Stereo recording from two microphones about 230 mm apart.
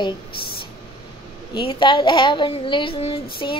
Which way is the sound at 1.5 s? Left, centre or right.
Left.